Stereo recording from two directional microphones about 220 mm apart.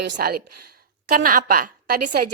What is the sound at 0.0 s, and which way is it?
A woman's voice, 45° right (ahead or behind).